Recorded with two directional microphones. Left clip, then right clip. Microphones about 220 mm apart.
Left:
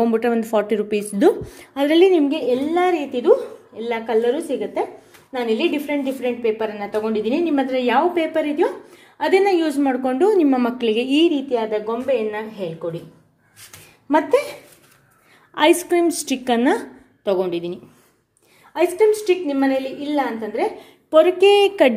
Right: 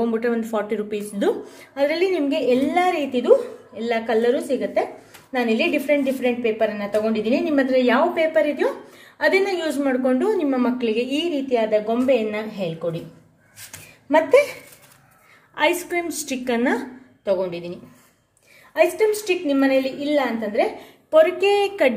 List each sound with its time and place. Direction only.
0.0 s a woman's voice: 40° left (ahead or behind); by 12.6 s 15° left (ahead or behind)
14.1 s a woman's voice: 30° left (ahead or behind)
15.5 s a woman's voice: 35° left (ahead or behind)
18.9 s a woman's voice: 25° left (ahead or behind)